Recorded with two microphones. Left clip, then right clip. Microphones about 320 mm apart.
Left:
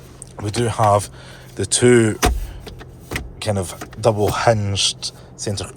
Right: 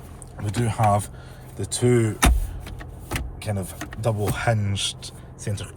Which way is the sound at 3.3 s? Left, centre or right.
Left.